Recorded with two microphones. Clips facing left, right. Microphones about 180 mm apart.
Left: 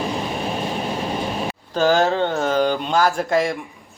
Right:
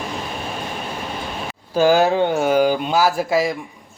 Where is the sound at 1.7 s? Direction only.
10° right (ahead or behind).